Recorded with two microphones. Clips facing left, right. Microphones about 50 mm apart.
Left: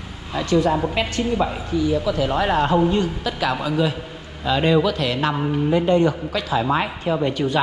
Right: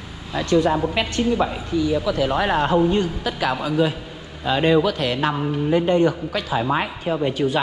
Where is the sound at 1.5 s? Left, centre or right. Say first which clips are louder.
Even; left.